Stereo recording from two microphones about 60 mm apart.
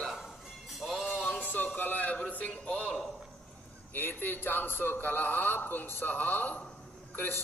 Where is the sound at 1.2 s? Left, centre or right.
Left.